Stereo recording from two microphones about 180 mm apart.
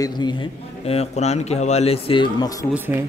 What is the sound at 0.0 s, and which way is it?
A man's voice, 25° left (ahead or behind).